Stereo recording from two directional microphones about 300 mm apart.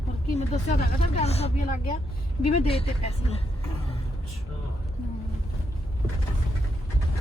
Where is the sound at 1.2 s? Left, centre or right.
Left.